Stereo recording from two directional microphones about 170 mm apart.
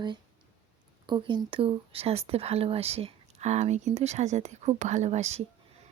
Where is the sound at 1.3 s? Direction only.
30° right (ahead or behind).